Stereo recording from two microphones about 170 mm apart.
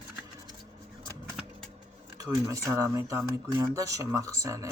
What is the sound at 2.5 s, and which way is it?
Speech, 20° right (ahead or behind).